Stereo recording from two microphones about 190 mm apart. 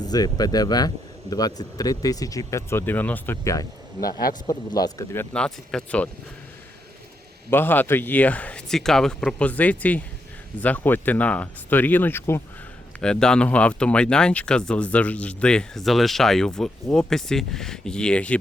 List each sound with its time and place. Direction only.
0.0 s speech: 20° left (ahead or behind)
5.3 s speech: 5° left (ahead or behind)
7.5 s a man's voice: 10° left (ahead or behind)